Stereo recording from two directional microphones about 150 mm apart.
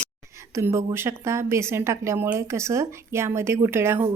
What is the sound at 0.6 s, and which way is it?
A woman's voice, 15° right (ahead or behind).